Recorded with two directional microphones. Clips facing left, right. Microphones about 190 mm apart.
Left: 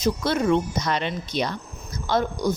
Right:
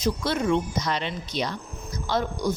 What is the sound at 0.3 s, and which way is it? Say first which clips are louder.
A woman's voice: left 3 dB; 50° left (ahead or behind).